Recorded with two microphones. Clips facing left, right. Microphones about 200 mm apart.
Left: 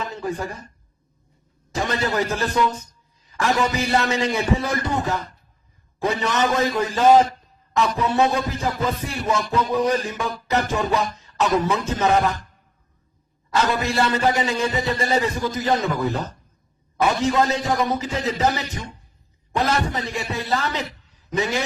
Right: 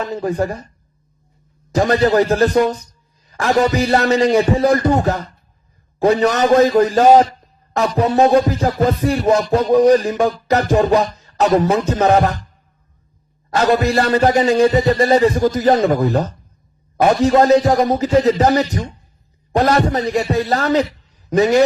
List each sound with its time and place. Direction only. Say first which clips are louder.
0.0 s a man's voice: right 8 dB; 40° right (ahead or behind)
1.7 s a man's voice: right 10 dB; 40° right (ahead or behind)
13.5 s a man's voice: right 7 dB; 40° right (ahead or behind)